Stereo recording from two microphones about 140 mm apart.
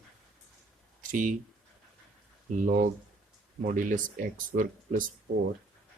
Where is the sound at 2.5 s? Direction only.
70° right (ahead or behind).